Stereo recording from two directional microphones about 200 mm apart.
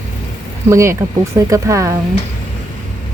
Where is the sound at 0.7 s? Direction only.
15° right (ahead or behind).